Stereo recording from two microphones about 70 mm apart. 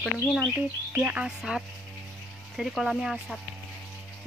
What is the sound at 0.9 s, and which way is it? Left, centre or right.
Speech, centre.